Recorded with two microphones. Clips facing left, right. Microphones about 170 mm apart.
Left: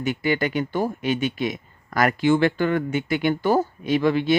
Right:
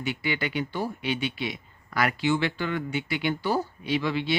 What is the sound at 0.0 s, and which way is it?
Speech, 45° left (ahead or behind).